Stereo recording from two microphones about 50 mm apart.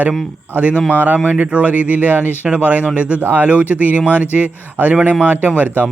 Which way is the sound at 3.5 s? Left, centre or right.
Right.